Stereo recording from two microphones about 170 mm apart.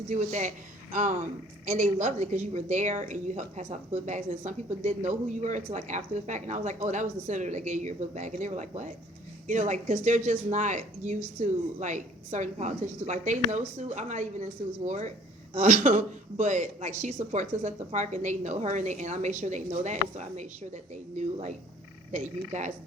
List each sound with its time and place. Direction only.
0.1 s a woman's voice: 45° right (ahead or behind)